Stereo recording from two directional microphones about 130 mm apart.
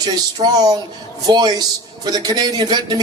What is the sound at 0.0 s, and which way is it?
Speech, 30° right (ahead or behind).